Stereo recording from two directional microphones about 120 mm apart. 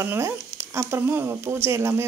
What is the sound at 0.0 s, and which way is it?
Speech, 20° right (ahead or behind).